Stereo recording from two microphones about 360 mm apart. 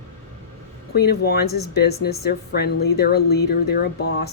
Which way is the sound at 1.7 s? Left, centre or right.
Left.